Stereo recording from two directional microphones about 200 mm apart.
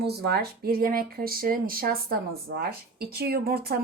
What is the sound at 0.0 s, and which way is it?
A woman's voice, 55° right (ahead or behind).